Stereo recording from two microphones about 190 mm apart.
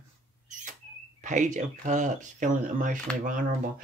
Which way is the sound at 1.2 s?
40° right (ahead or behind).